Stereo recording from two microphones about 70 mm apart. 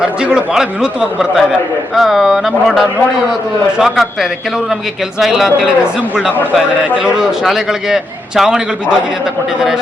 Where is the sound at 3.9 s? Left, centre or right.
Centre.